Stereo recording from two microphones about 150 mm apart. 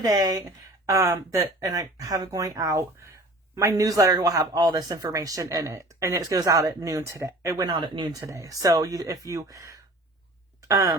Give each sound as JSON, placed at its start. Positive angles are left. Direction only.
{"t": 0.0, "sound": "speech", "side_deg": -25}